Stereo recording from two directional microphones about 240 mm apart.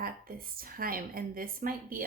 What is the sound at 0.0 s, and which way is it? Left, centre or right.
Speech, right.